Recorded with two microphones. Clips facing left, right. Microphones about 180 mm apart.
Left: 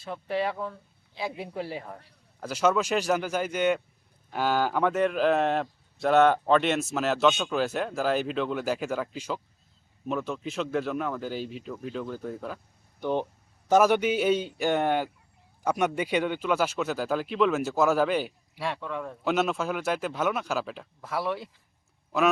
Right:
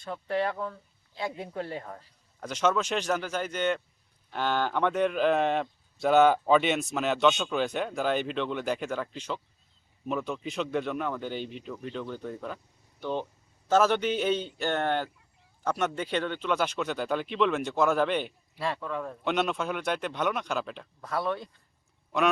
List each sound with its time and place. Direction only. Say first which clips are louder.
0.0 s a man's voice: even; 5° left (ahead or behind)
13.0 s a man's voice: left 4 dB; 15° left (ahead or behind)